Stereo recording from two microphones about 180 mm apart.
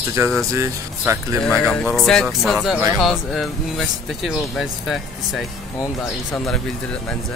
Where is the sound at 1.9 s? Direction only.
5° left (ahead or behind).